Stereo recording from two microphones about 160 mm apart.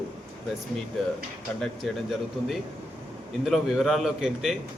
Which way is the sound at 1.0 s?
Centre (ahead or behind).